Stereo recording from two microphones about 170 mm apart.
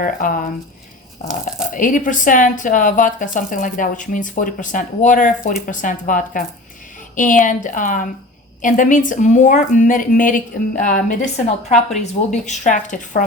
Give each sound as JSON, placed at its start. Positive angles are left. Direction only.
{"t": 0.0, "sound": "speech", "side_deg": 55}
{"t": 1.7, "sound": "speech", "side_deg": 50}